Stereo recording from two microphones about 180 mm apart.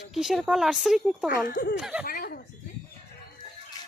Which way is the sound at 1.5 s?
55° left (ahead or behind).